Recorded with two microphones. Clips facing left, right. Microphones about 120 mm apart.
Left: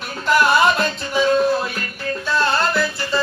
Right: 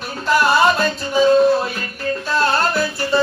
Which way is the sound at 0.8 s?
35° right (ahead or behind).